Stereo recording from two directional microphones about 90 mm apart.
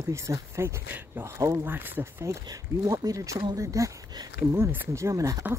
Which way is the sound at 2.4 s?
50° right (ahead or behind).